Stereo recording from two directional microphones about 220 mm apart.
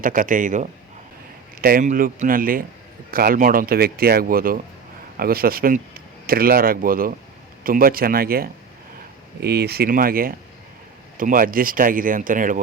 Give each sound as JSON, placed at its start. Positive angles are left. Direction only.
{"t": 0.0, "sound": "speech", "side_deg": -40}